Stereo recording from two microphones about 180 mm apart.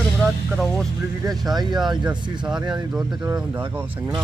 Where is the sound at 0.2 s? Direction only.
Centre (ahead or behind).